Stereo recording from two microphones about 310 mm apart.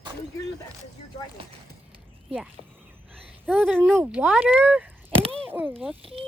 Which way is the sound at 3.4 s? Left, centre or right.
Centre.